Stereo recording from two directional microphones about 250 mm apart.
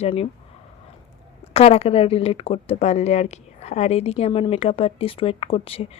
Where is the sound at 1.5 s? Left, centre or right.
Left.